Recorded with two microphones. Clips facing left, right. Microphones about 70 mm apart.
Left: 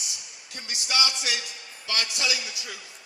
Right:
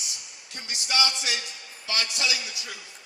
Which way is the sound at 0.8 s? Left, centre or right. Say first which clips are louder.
Even; right.